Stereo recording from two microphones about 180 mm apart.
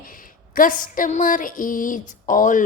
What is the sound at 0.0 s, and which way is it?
A woman's voice, 50° left (ahead or behind).